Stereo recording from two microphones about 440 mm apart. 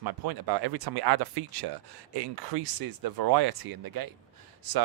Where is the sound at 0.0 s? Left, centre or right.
Right.